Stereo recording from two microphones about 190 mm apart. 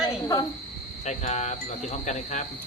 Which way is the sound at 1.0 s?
40° left (ahead or behind).